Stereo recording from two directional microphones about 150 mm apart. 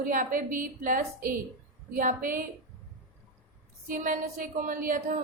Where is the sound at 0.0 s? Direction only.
65° right (ahead or behind).